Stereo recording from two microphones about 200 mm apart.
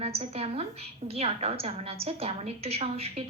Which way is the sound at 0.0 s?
30° right (ahead or behind).